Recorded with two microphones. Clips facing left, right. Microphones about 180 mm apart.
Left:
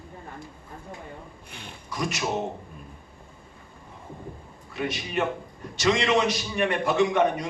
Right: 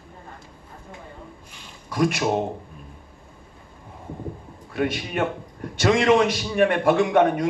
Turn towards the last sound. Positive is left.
turn(degrees=-55)  # may be behind; listen again after turning